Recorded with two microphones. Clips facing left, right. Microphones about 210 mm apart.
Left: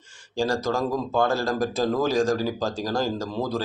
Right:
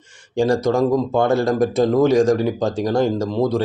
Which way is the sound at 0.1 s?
20° right (ahead or behind).